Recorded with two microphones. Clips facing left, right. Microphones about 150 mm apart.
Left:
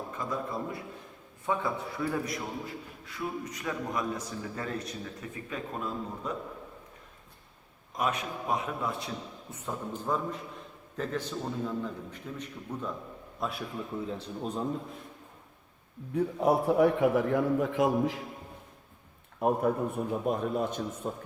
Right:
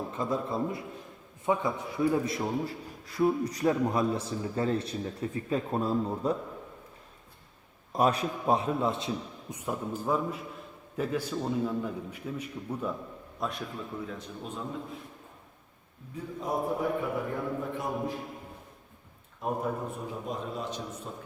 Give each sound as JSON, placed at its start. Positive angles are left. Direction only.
{"t": 0.1, "sound": "a man's voice", "side_deg": -25}
{"t": 7.9, "sound": "a man's voice", "side_deg": -35}
{"t": 14.1, "sound": "a man's voice", "side_deg": 35}
{"t": 16.1, "sound": "a man's voice", "side_deg": 70}
{"t": 19.4, "sound": "a man's voice", "side_deg": 60}